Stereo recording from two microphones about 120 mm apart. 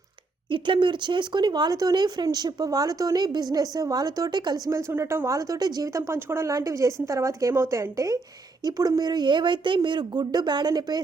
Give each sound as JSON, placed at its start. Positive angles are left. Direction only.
{"t": 0.5, "sound": "speech", "side_deg": -45}
{"t": 4.9, "sound": "speech", "side_deg": -20}